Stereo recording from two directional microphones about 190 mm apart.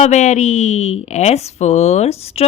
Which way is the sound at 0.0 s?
40° left (ahead or behind).